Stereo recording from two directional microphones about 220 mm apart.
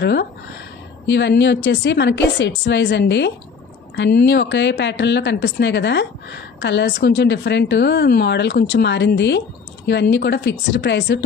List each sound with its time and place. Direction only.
0.0 s a woman's voice: 50° left (ahead or behind)